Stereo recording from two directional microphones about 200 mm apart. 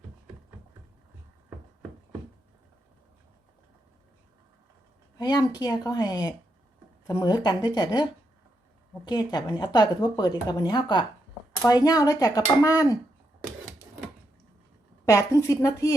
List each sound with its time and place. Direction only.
5.1 s a woman's voice: 20° left (ahead or behind)
9.0 s a woman's voice: 20° left (ahead or behind)
15.0 s a woman's voice: 15° left (ahead or behind)